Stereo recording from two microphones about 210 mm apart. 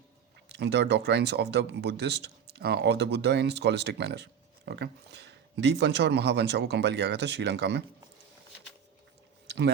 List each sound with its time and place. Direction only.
0.5 s speech: 55° right (ahead or behind)